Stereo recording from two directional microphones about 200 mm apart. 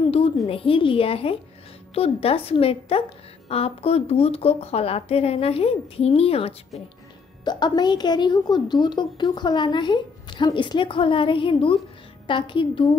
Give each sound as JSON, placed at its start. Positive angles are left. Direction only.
{"t": 0.5, "sound": "a woman's voice", "side_deg": 25}